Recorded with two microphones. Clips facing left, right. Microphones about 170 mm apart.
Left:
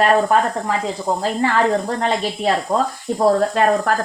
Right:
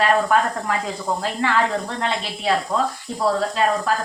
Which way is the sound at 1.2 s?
40° left (ahead or behind).